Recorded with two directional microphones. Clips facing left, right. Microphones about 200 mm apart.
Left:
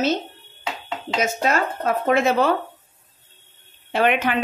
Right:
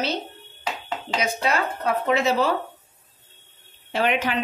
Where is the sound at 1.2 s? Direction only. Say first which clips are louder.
Left 3 dB; 45° left (ahead or behind).